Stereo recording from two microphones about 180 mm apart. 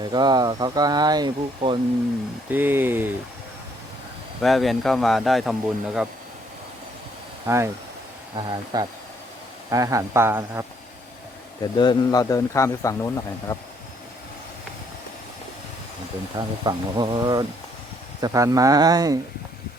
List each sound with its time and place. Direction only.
0.0 s speech: 25° right (ahead or behind)
2.5 s speech: 10° right (ahead or behind)
4.4 s speech: centre (ahead or behind)
7.4 s speech: 15° right (ahead or behind)
8.4 s speech: 25° right (ahead or behind)
11.6 s a man's voice: 25° left (ahead or behind)
16.6 s speech: 25° right (ahead or behind)